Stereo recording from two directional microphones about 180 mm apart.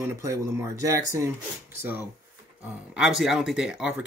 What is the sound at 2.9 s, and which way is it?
Speech, 5° right (ahead or behind).